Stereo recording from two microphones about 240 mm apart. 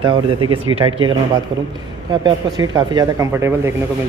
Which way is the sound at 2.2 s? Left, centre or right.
Centre.